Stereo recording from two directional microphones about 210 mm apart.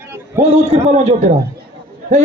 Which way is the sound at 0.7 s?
30° right (ahead or behind).